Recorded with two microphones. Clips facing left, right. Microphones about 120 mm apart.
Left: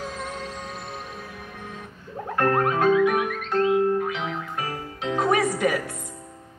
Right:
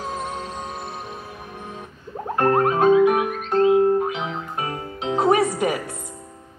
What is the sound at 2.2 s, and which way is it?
Music, 30° right (ahead or behind).